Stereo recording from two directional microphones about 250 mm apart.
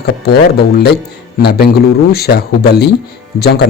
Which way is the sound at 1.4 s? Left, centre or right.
Left.